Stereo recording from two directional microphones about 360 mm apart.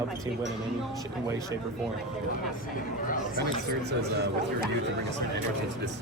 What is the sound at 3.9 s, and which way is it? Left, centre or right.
Speech, right.